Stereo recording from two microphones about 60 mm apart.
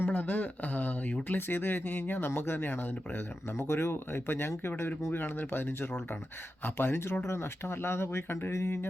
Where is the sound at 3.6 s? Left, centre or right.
Left.